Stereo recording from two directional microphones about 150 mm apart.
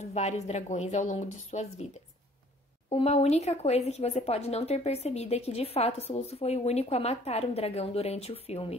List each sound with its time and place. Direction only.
0.1 s speech: 45° left (ahead or behind)
2.9 s speech: 40° left (ahead or behind)